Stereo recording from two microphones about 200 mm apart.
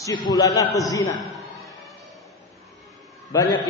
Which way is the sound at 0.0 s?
20° left (ahead or behind).